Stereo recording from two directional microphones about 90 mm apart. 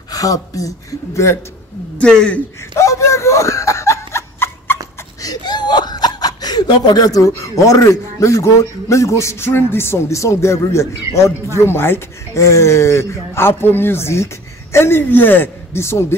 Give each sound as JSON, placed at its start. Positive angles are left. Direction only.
{"t": 0.1, "sound": "speech", "side_deg": 40}
{"t": 2.0, "sound": "speech", "side_deg": 10}
{"t": 2.7, "sound": "a sound", "side_deg": 35}
{"t": 5.2, "sound": "speech", "side_deg": 50}